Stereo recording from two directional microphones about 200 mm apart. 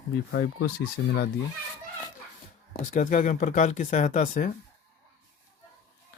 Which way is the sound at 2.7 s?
40° left (ahead or behind).